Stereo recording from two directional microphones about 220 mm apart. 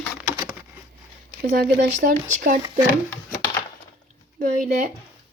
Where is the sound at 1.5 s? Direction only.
40° right (ahead or behind).